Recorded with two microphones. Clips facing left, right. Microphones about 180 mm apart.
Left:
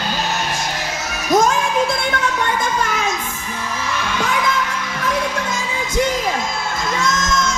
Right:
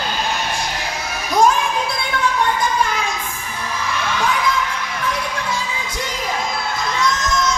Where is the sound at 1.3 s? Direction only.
45° left (ahead or behind).